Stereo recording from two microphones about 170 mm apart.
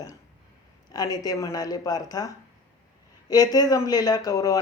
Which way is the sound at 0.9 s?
20° left (ahead or behind).